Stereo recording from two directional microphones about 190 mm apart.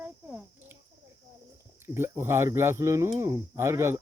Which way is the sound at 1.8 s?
10° right (ahead or behind).